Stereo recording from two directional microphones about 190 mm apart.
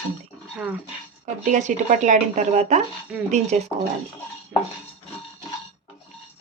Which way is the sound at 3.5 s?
35° right (ahead or behind).